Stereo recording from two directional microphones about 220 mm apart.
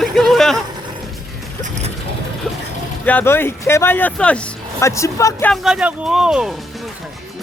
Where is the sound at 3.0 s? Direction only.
10° left (ahead or behind).